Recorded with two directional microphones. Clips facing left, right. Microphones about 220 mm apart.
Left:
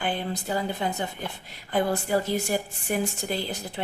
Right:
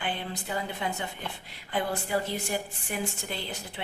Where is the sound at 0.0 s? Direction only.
35° left (ahead or behind).